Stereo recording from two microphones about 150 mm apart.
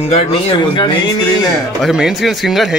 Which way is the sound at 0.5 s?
30° left (ahead or behind).